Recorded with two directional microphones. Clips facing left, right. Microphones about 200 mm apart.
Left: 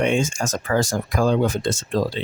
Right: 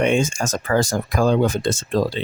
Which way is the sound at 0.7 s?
65° right (ahead or behind).